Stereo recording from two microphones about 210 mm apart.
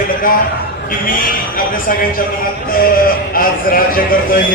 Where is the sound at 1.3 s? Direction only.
40° left (ahead or behind).